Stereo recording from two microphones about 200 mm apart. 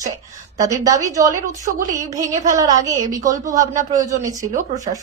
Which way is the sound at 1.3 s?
40° right (ahead or behind).